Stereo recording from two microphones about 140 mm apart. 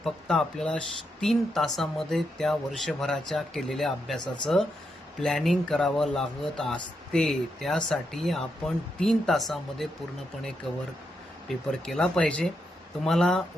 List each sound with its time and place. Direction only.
0.0 s speech: 5° left (ahead or behind)
5.2 s speech: centre (ahead or behind)